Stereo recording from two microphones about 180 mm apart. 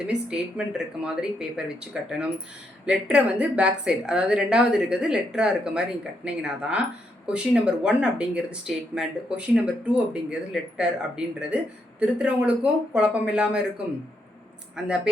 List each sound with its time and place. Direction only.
0.0 s speech: 5° right (ahead or behind)